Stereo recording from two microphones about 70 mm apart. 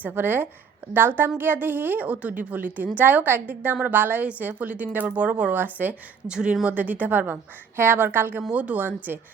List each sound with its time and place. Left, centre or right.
0.0 s a woman's voice: right
6.2 s speech: centre
6.7 s a woman's voice: right